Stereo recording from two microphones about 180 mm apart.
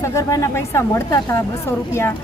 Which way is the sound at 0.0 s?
15° left (ahead or behind).